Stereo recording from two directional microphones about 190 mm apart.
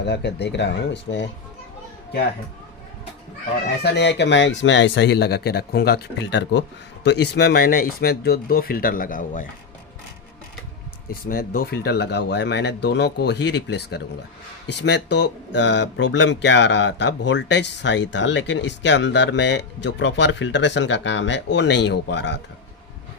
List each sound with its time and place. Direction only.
0.0 s speech: 65° left (ahead or behind)
3.8 s speech: 65° left (ahead or behind); by 9.5 s 45° left (ahead or behind)
11.1 s speech: 50° left (ahead or behind); by 22.4 s 65° left (ahead or behind)